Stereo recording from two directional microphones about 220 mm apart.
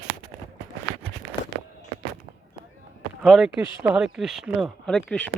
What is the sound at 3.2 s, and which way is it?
Speech, centre (ahead or behind).